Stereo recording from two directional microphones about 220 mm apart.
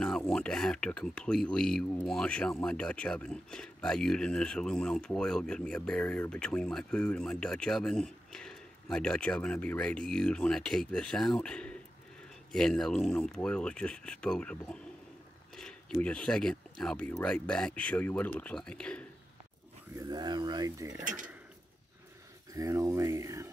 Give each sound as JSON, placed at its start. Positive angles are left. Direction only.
{"t": 0.0, "sound": "speech", "side_deg": 5}
{"t": 19.9, "sound": "speech", "side_deg": -15}
{"t": 22.5, "sound": "speech", "side_deg": -15}